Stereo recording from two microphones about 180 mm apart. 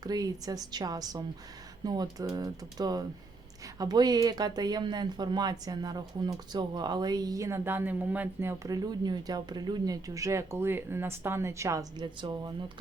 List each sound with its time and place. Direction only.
0.0 s speech: 20° right (ahead or behind)